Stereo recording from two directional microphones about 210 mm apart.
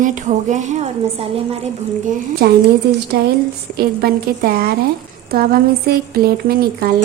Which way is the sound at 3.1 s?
50° right (ahead or behind).